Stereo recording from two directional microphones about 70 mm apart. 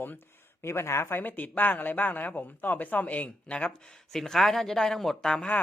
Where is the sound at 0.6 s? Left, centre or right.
Left; by 3.8 s centre.